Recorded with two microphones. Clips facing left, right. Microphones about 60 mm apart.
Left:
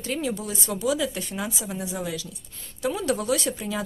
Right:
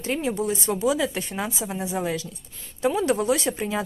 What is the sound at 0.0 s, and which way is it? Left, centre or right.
Speech, right.